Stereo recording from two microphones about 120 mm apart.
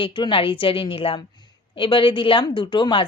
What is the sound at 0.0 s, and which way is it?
A woman's voice, 45° left (ahead or behind).